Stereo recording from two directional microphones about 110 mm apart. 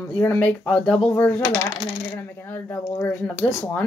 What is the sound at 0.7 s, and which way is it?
Coin, 5° left (ahead or behind).